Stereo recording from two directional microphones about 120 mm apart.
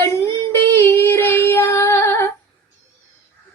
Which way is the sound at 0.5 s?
20° left (ahead or behind).